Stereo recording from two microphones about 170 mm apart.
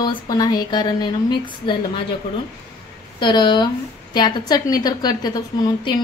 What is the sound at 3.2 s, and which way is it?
A woman's voice, 25° left (ahead or behind).